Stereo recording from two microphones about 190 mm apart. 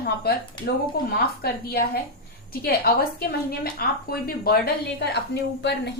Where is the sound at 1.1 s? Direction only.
55° left (ahead or behind).